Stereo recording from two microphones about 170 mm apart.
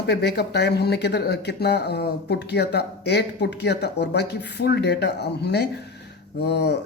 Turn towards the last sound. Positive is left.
turn(degrees=80)